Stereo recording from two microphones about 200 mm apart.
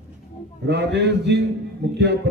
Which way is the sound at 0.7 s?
60° right (ahead or behind).